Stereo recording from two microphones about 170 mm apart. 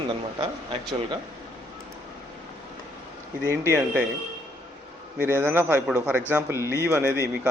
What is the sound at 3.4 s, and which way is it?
Speech, 15° right (ahead or behind).